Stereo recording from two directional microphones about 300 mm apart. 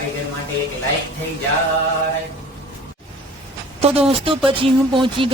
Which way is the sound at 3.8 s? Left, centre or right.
Centre.